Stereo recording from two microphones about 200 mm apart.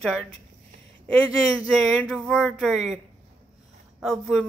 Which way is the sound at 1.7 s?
5° left (ahead or behind).